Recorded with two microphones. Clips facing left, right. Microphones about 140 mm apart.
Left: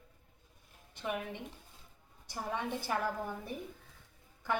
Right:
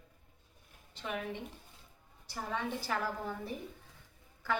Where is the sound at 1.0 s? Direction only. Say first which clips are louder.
Left 1 dB; 15° left (ahead or behind).